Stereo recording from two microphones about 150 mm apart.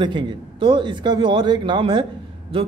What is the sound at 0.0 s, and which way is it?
Speech, 30° right (ahead or behind).